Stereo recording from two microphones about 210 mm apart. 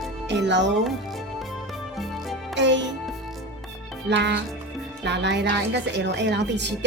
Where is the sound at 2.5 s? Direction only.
60° right (ahead or behind).